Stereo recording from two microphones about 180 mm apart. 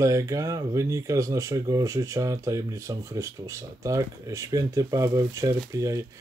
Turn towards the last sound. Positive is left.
turn(degrees=-20)  # may be behind; listen again after turning